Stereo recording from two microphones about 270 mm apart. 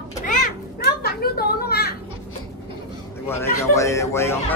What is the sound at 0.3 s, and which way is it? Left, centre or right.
Children playing, left.